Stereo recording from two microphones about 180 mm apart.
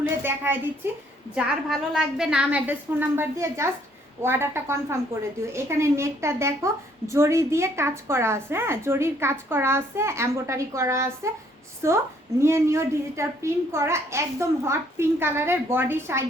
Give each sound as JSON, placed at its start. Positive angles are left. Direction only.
{"t": 0.2, "sound": "a woman's voice", "side_deg": -10}
{"t": 1.9, "sound": "a woman's voice", "side_deg": 0}